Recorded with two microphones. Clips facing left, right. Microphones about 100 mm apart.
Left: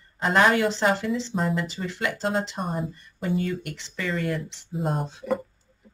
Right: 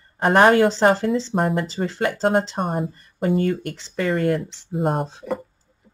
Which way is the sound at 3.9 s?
50° right (ahead or behind).